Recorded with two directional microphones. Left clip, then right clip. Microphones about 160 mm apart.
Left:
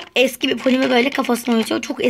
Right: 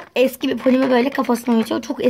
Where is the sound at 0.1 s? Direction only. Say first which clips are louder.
Left 1 dB; centre (ahead or behind).